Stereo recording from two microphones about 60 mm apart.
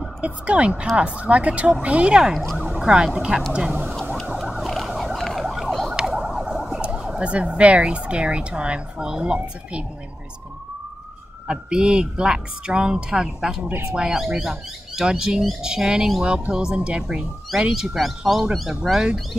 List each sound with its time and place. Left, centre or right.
0.2 s speech: centre
2.7 s emergency vehicle: centre
3.2 s speech: centre
4.6 s emergency vehicle: centre
5.9 s emergency vehicle: centre
6.2 s speech: centre
11.4 s speech: centre